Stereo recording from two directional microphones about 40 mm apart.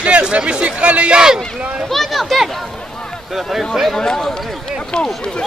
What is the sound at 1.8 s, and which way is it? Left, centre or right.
Speech, centre.